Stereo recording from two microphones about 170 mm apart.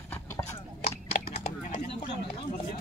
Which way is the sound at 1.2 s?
45° left (ahead or behind).